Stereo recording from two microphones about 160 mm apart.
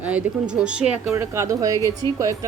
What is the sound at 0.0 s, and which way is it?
Speech, 10° right (ahead or behind).